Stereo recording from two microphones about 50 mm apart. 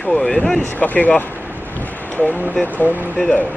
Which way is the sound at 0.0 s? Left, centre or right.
Centre.